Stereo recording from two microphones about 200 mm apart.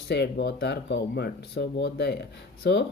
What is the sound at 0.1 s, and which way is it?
Speech, 55° left (ahead or behind).